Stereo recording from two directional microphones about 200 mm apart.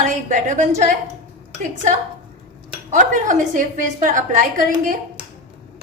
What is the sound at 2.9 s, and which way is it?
A woman's voice, 40° right (ahead or behind).